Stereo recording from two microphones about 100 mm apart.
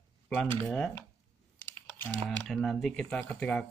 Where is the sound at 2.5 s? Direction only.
5° left (ahead or behind).